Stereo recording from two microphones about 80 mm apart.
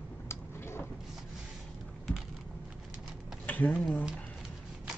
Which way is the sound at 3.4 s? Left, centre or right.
Centre.